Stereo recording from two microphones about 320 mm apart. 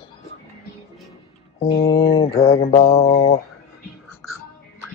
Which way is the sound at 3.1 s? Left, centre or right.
Left.